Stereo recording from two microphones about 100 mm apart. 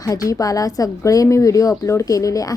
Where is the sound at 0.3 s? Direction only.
35° left (ahead or behind).